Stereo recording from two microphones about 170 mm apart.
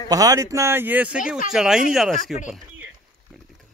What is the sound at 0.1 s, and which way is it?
Speech, 20° right (ahead or behind).